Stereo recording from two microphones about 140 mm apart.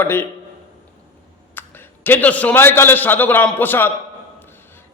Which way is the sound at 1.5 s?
15° left (ahead or behind).